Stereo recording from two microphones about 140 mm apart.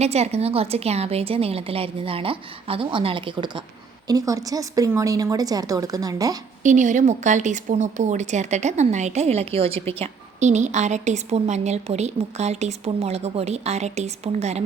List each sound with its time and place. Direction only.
0.0 s a woman's voice: 50° right (ahead or behind)
4.0 s speech: 25° right (ahead or behind)
6.6 s speech: 60° right (ahead or behind); by 9.9 s 45° right (ahead or behind)
10.0 s a woman's voice: 55° right (ahead or behind)